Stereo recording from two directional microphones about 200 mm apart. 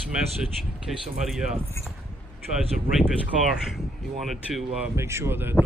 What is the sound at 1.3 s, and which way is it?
Speech, 5° right (ahead or behind).